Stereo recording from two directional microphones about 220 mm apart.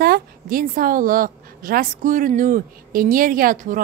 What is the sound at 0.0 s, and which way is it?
A woman's voice, 40° right (ahead or behind).